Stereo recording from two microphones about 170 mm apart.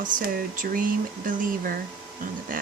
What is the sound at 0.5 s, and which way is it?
Speech, 55° right (ahead or behind).